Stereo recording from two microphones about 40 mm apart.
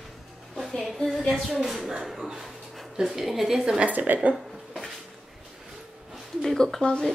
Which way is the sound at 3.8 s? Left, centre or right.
Right.